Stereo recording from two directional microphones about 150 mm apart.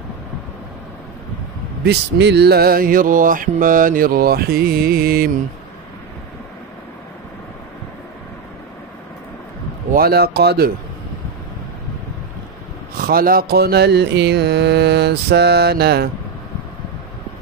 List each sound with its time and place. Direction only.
1.9 s a sound: 90° right
9.8 s mantra: 85° right
13.0 s mantra: 75° right (ahead or behind); by 16.1 s 90° right